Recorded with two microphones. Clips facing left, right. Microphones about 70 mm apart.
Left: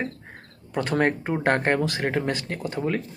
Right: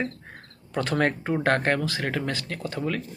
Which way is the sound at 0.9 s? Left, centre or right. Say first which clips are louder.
Left 1 dB; left.